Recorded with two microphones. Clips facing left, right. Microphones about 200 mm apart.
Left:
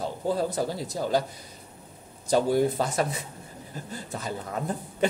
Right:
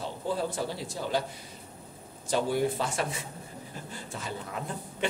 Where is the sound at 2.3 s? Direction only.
40° left (ahead or behind).